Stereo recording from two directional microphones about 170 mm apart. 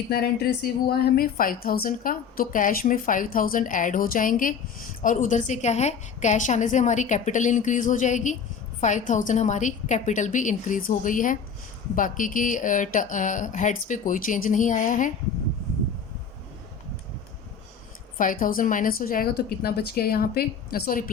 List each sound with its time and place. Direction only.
0.1 s a woman's voice: 65° left (ahead or behind); by 15.1 s 50° left (ahead or behind)
18.2 s speech: 50° left (ahead or behind)